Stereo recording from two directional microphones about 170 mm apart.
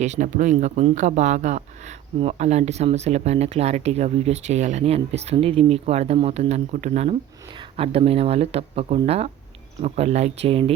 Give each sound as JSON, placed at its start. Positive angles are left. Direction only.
{"t": 0.0, "sound": "speech", "side_deg": -45}